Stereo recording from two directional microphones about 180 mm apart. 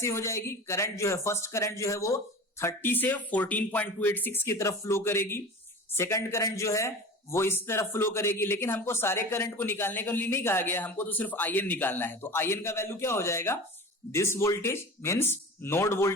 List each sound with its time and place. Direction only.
0.0 s a man's voice: 15° left (ahead or behind)